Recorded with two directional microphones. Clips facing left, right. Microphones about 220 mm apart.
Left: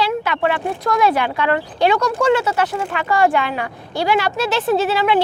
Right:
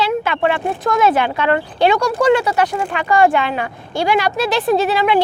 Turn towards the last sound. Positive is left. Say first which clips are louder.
# right 1 dB
turn(degrees=-15)  # may be behind; listen again after turning